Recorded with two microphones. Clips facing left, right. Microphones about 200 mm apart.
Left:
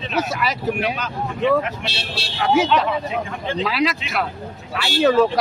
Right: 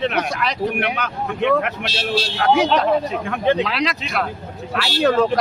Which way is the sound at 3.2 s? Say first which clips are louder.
Right 8 dB; 65° right (ahead or behind).